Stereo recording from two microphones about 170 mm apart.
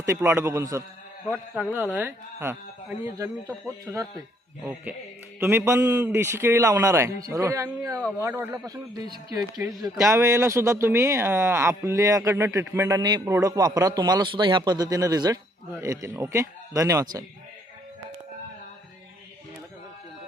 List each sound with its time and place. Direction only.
0.0 s a man's voice: 15° right (ahead or behind)
4.6 s music: 5° right (ahead or behind)
5.4 s a man's voice: 15° right (ahead or behind)